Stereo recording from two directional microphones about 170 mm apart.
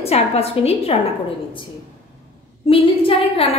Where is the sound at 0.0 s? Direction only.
35° left (ahead or behind).